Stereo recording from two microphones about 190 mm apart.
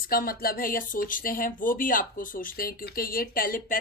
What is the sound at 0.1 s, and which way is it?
Speech, 50° left (ahead or behind).